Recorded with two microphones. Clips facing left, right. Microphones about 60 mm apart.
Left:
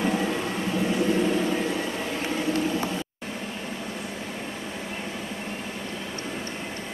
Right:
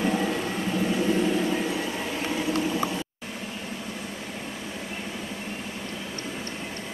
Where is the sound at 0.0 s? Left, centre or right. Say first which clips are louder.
Even; centre.